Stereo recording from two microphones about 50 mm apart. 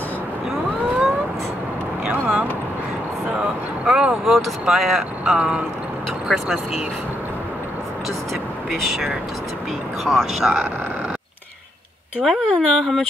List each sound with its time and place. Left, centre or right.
2.0 s vehicle: right
3.8 s speech: centre
6.2 s speech: centre
8.6 s speech: centre
10.0 s speech: centre
12.3 s speech: centre